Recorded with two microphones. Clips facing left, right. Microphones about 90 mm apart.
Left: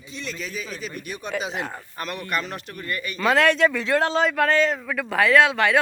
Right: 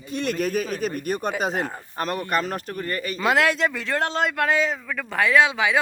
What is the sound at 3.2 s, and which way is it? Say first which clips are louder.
Speech: left 2 dB; 5° right (ahead or behind).